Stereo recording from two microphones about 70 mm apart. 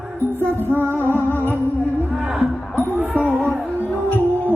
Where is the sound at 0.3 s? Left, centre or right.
Right.